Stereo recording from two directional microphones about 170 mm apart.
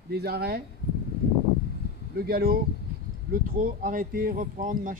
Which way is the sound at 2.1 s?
65° right (ahead or behind).